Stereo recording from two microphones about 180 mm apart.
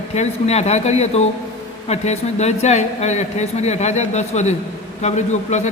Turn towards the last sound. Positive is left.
turn(degrees=40)  # may be behind; listen again after turning